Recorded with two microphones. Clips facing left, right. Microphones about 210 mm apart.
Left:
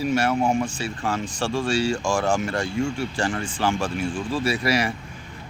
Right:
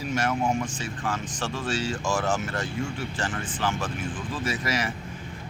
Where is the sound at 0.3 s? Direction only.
25° left (ahead or behind).